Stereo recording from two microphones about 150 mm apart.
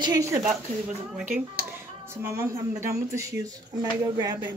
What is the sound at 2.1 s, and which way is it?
Speech, 15° right (ahead or behind).